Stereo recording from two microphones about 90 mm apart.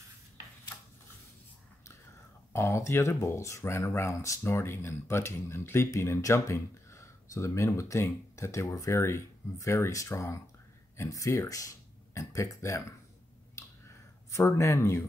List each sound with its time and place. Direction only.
2.5 s speech: 30° left (ahead or behind)
14.3 s speech: 35° left (ahead or behind)